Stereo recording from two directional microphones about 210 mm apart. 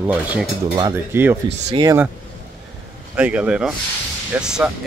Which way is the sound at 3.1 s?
5° right (ahead or behind).